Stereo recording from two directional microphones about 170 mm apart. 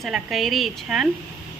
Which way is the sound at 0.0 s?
Centre (ahead or behind).